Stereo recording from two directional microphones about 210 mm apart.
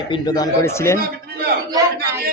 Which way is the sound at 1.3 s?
50° right (ahead or behind).